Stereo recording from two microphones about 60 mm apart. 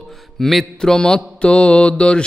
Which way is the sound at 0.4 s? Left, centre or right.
Centre.